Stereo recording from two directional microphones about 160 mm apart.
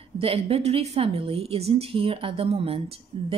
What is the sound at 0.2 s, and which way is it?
Speech, 35° right (ahead or behind).